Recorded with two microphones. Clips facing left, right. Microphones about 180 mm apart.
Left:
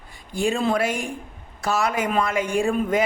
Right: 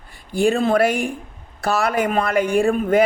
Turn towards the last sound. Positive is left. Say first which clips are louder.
# right 5 dB
turn(degrees=-55)  # may be behind; listen again after turning